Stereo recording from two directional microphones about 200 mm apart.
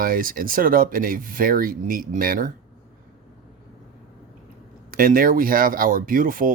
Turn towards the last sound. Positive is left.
turn(degrees=-45)  # may be behind; listen again after turning